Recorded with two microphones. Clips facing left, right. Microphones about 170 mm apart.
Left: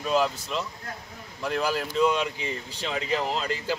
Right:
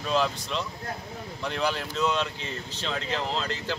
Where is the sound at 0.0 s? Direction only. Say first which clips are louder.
Left 2 dB; 5° left (ahead or behind).